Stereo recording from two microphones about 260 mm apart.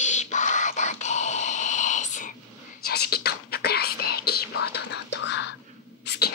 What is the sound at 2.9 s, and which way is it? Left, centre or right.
Whispering, left.